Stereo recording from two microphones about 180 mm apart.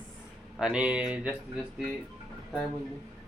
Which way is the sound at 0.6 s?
5° right (ahead or behind).